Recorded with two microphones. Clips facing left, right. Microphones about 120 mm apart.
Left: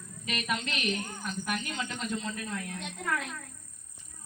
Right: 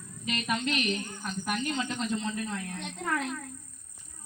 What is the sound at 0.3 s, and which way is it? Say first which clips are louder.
Speech: right 2 dB; 25° right (ahead or behind).